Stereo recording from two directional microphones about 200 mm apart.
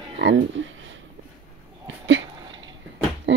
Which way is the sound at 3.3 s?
65° right (ahead or behind).